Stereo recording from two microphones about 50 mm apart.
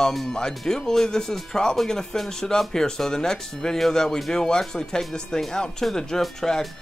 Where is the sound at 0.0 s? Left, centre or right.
Centre.